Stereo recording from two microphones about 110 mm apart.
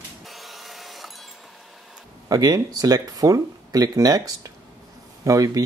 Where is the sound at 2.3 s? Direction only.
35° right (ahead or behind).